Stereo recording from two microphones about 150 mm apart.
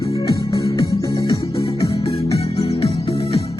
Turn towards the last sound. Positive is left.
turn(degrees=40)  # may be behind; listen again after turning